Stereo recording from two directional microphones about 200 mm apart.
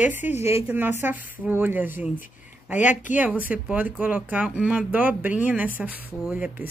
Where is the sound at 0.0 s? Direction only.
10° right (ahead or behind).